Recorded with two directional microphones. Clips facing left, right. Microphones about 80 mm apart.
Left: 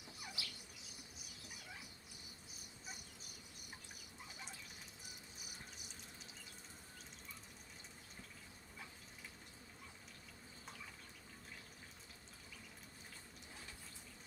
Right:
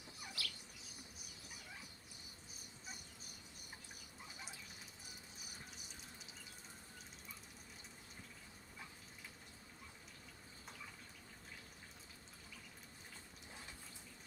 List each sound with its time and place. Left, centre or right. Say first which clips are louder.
0.4 s insect: right 5 dB; centre